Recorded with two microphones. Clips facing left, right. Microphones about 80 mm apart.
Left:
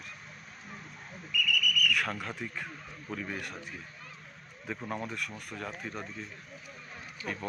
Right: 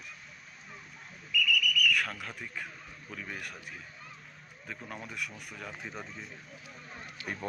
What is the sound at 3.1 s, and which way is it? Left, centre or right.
Speech, centre.